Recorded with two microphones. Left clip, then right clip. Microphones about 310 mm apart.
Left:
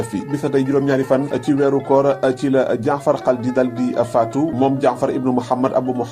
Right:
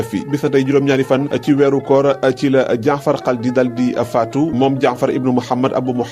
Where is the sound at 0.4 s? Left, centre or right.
Right.